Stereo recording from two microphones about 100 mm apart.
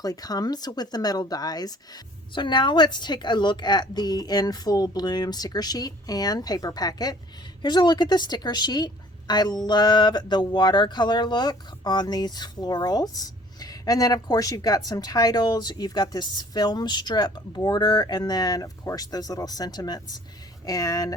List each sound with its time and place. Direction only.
0.0 s speech: 40° left (ahead or behind)